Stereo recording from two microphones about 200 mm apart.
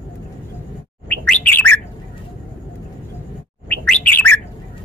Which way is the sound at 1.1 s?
5° left (ahead or behind).